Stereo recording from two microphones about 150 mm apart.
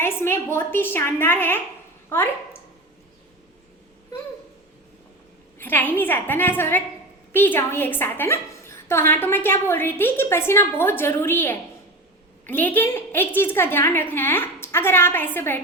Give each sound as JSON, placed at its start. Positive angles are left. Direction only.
{"t": 0.0, "sound": "a woman's voice", "side_deg": 15}
{"t": 5.5, "sound": "a woman's voice", "side_deg": 15}